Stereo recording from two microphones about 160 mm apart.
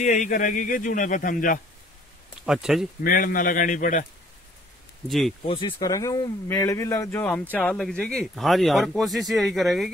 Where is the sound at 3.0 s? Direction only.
60° left (ahead or behind).